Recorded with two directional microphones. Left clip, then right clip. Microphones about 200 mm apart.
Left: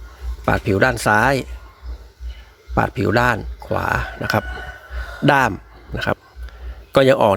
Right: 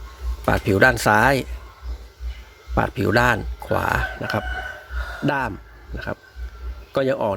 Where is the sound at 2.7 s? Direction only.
15° left (ahead or behind).